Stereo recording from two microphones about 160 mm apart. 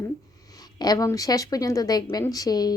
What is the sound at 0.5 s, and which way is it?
Speech, 25° left (ahead or behind).